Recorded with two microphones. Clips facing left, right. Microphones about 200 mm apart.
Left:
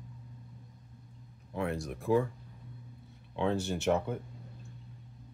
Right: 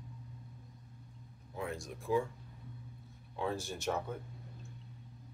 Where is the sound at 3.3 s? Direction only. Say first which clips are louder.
Left 6 dB; 70° left (ahead or behind).